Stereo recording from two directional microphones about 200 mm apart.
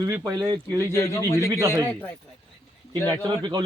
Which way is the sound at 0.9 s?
15° left (ahead or behind).